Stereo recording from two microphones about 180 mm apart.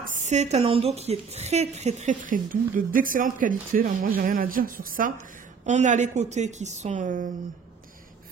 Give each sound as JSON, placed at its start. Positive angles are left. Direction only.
{"t": 0.0, "sound": "a woman's voice", "side_deg": -40}